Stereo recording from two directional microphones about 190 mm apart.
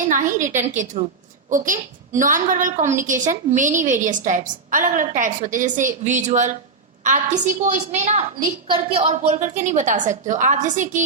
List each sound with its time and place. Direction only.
0.1 s a woman's voice: 40° right (ahead or behind)